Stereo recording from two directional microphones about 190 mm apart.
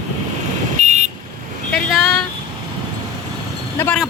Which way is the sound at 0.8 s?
40° right (ahead or behind).